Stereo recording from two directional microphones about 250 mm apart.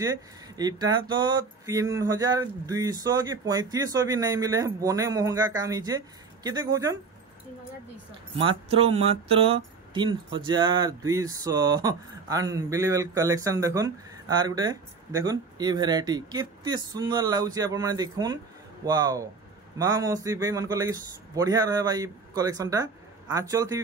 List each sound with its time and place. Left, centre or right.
0.6 s speech: centre
8.4 s speech: right